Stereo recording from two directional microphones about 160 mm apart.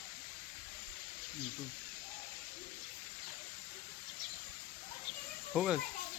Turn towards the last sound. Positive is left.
turn(degrees=0)  # may be behind; listen again after turning